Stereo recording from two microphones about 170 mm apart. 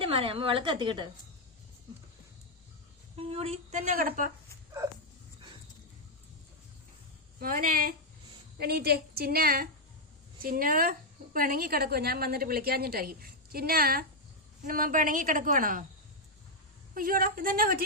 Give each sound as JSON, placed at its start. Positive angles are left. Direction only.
{"t": 0.0, "sound": "a woman's voice", "side_deg": -35}
{"t": 3.2, "sound": "a woman's voice", "side_deg": -35}
{"t": 3.9, "sound": "a woman's voice", "side_deg": -55}
{"t": 7.3, "sound": "a woman's voice", "side_deg": -55}
{"t": 16.9, "sound": "a woman's voice", "side_deg": -55}